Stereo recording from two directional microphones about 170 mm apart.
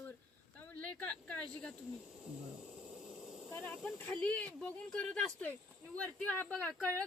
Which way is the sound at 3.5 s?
10° left (ahead or behind).